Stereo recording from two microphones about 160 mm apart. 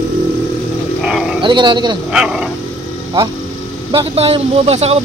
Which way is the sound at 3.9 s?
40° right (ahead or behind).